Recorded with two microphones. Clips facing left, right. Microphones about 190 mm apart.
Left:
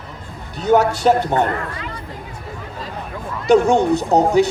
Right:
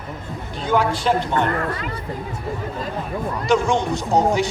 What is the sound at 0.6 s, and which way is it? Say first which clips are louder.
Speech: left 5 dB; 45° left (ahead or behind).